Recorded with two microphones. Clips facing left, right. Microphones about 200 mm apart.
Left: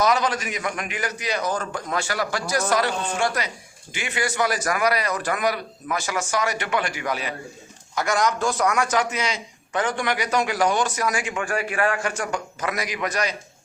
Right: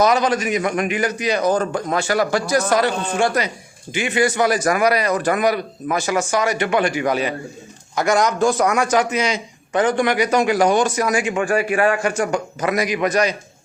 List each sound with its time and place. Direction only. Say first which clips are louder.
0.0 s a man's voice: right 5 dB; 20° right (ahead or behind)